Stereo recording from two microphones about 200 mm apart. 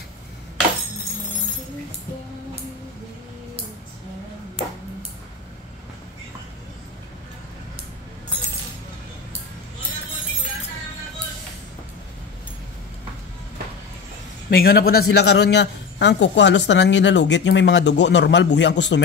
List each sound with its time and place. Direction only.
14.5 s a man's voice: 50° left (ahead or behind)